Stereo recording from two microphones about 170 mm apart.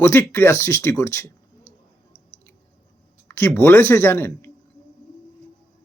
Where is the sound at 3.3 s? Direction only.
15° left (ahead or behind).